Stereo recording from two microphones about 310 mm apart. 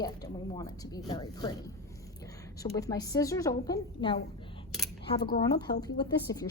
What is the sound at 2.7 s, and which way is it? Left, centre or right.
A woman's voice, centre.